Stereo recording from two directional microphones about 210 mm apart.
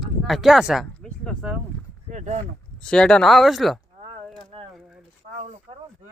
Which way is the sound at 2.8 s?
5° left (ahead or behind).